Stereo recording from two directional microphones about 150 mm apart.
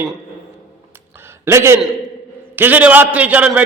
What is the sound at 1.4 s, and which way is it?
A man's voice, 15° right (ahead or behind).